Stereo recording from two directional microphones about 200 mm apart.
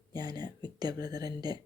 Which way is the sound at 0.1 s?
20° right (ahead or behind).